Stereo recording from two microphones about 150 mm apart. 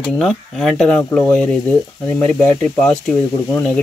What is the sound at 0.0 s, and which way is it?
Speech, centre (ahead or behind).